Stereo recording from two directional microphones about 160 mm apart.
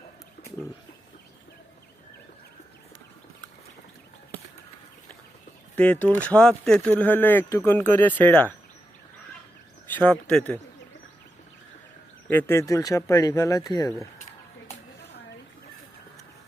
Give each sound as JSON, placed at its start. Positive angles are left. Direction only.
{"t": 5.7, "sound": "speech", "side_deg": 10}
{"t": 9.9, "sound": "speech", "side_deg": 10}
{"t": 12.3, "sound": "speech", "side_deg": 15}